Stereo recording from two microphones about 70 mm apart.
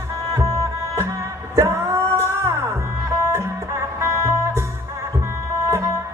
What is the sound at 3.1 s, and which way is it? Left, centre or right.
Music, right.